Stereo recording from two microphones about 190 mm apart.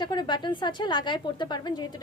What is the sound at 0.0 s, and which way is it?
A woman's voice, 20° left (ahead or behind).